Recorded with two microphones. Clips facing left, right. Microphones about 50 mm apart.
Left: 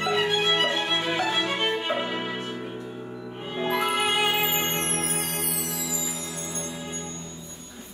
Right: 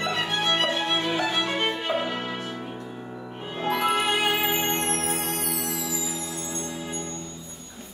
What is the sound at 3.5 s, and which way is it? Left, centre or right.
Music, centre.